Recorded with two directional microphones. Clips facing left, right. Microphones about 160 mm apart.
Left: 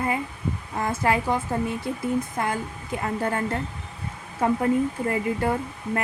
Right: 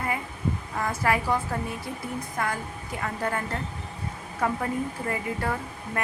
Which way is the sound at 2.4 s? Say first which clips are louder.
Left 3 dB; 25° left (ahead or behind).